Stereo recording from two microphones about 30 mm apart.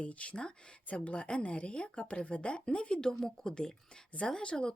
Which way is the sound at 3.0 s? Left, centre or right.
Left.